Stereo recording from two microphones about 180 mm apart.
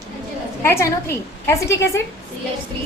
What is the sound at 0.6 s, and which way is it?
A woman's voice, 15° left (ahead or behind).